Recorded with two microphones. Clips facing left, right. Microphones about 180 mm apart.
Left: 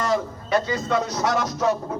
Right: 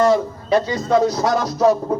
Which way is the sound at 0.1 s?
35° right (ahead or behind).